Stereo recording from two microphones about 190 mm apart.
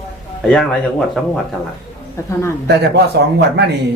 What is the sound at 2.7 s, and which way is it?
Speech, 60° right (ahead or behind).